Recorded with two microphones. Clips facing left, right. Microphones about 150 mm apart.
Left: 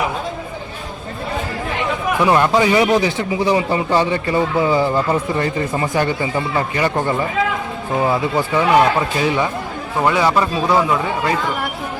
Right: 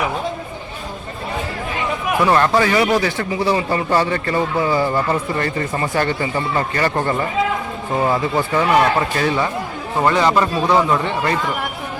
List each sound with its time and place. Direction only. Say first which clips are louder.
2.2 s a man's voice: left 1 dB; 15° left (ahead or behind)